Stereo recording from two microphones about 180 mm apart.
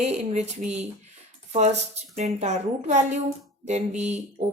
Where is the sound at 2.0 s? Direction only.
35° right (ahead or behind).